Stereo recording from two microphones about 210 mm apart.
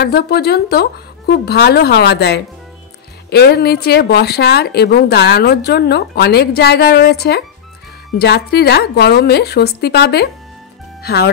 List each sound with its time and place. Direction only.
0.0 s a woman's voice: 50° left (ahead or behind)
11.0 s music: 50° left (ahead or behind)